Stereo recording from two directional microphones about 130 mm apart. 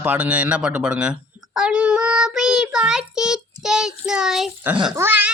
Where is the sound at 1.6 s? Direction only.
10° right (ahead or behind).